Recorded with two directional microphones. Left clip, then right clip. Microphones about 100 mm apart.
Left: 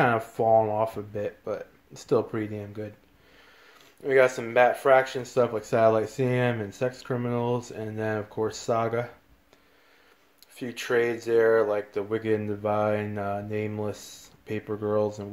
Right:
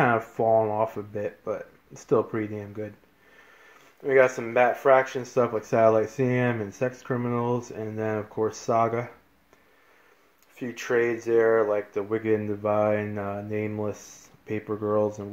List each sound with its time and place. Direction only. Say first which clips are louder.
0.3 s speech: left 1 dB; 15° left (ahead or behind)
4.0 s speech: right 1 dB; 20° left (ahead or behind)
10.5 s speech: even; 15° left (ahead or behind)